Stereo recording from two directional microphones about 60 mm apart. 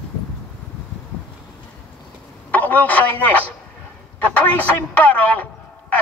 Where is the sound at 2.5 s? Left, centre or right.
Left.